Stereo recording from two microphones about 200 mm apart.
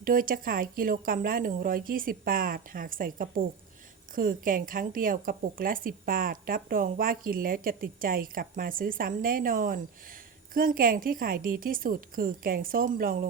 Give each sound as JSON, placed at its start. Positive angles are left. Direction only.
{"t": 0.0, "sound": "a woman's voice", "side_deg": -45}